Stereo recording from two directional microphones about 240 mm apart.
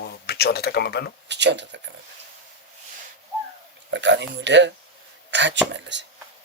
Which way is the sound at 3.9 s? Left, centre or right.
Right.